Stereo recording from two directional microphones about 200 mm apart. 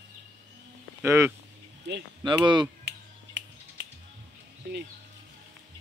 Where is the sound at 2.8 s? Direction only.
60° right (ahead or behind).